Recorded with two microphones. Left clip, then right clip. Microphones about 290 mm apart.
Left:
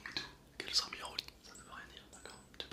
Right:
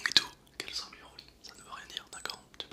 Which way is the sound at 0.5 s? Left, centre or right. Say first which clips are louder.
Left 4 dB; centre.